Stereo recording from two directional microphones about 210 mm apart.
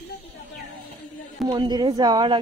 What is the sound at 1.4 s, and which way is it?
Speech, 20° right (ahead or behind).